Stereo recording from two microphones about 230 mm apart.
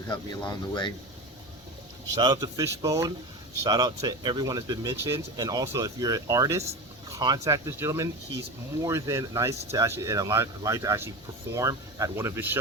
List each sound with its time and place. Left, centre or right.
0.1 s speech: centre
2.1 s speech: centre